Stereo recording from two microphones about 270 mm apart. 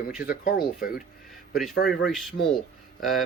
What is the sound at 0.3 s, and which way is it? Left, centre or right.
Speech, left.